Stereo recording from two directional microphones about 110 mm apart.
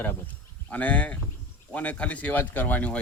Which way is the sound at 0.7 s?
15° left (ahead or behind).